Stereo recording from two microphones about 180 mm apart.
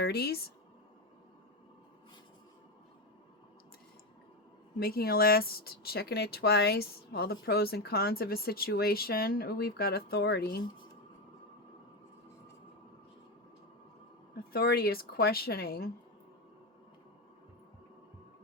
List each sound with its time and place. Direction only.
0.0 s speech: 60° left (ahead or behind)
4.8 s speech: 55° left (ahead or behind)
14.5 s speech: 60° left (ahead or behind)